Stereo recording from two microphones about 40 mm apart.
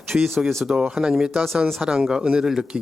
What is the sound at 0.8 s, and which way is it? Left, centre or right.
Speech, right.